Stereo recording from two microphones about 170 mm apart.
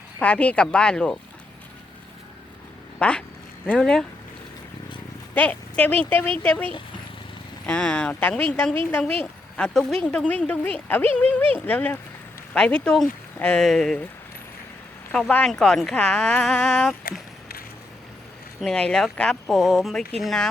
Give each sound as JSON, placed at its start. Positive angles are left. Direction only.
{"t": 0.2, "sound": "a woman's voice", "side_deg": 5}
{"t": 3.0, "sound": "a woman's voice", "side_deg": 5}
{"t": 5.3, "sound": "a woman's voice", "side_deg": 10}
{"t": 15.1, "sound": "speech", "side_deg": 5}
{"t": 17.0, "sound": "a sound", "side_deg": 60}
{"t": 18.6, "sound": "speech", "side_deg": 5}